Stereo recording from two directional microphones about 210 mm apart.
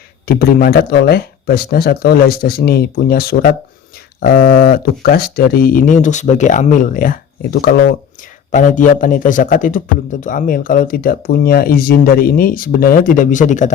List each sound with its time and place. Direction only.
0.3 s a man's voice: 45° left (ahead or behind)